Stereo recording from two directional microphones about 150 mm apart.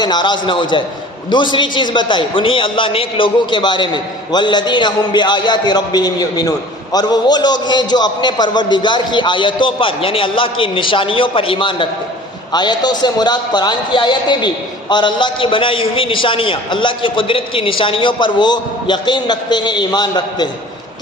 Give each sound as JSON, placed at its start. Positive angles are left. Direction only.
{"t": 0.0, "sound": "a man's voice", "side_deg": 30}